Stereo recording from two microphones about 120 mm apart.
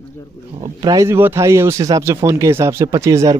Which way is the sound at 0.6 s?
35° right (ahead or behind).